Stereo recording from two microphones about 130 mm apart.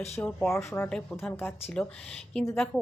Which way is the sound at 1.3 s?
15° left (ahead or behind).